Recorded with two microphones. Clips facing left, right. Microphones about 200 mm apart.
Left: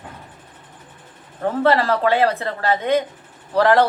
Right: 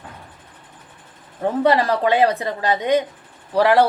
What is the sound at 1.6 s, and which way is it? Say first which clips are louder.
A woman's voice: even; 15° right (ahead or behind).